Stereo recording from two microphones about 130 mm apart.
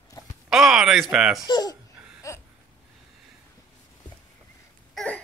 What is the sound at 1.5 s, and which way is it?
Speech, 30° left (ahead or behind).